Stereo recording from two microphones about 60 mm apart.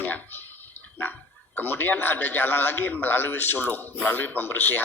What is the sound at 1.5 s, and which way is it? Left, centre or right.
A man's voice, left.